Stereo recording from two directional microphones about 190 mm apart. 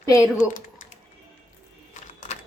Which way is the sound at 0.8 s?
40° left (ahead or behind).